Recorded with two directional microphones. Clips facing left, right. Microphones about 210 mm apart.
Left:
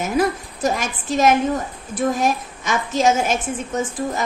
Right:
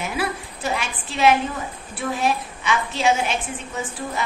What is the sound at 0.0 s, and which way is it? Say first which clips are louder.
A woman's voice: left 7 dB; 45° left (ahead or behind).